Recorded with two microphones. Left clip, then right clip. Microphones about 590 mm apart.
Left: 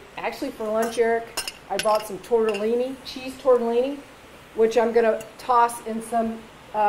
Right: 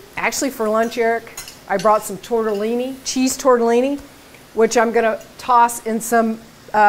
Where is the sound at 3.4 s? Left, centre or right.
Right.